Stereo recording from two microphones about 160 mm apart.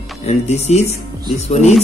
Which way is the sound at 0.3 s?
40° left (ahead or behind).